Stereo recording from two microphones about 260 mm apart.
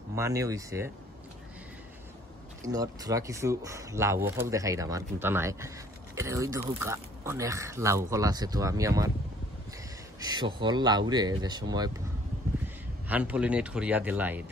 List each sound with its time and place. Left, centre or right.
0.1 s speech: centre
2.6 s speech: centre
10.2 s speech: centre